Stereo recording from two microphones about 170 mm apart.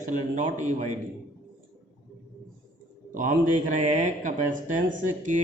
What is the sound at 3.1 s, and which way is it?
Speech, 50° right (ahead or behind).